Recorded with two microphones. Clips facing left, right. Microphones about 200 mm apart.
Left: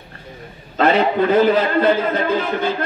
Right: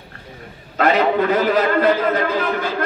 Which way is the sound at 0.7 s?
30° left (ahead or behind).